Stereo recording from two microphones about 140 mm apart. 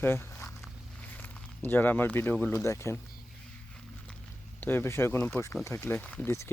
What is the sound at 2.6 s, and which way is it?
Speech, 20° left (ahead or behind).